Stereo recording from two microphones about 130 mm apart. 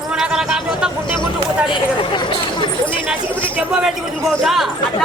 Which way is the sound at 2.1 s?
35° left (ahead or behind).